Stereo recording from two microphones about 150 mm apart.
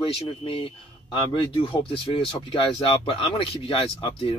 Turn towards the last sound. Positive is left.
turn(degrees=40)  # may be behind; listen again after turning